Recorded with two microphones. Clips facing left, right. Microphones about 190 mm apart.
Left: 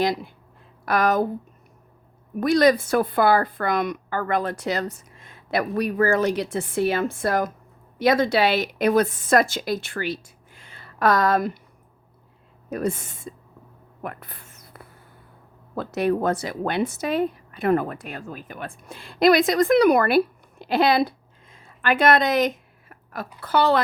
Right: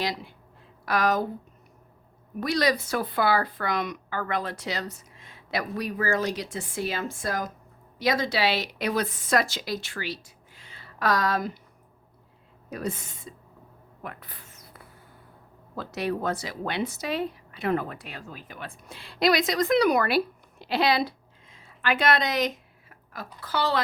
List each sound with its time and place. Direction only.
0.0 s speech: 50° left (ahead or behind)
2.4 s speech: 50° left (ahead or behind)
12.7 s speech: 50° left (ahead or behind)
14.0 s a sound: 55° left (ahead or behind)
15.7 s a woman's voice: 50° left (ahead or behind)